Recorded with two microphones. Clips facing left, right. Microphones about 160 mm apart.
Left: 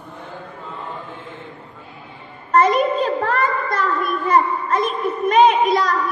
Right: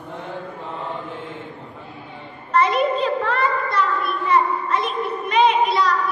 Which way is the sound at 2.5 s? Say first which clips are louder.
Left 3 dB; 45° left (ahead or behind).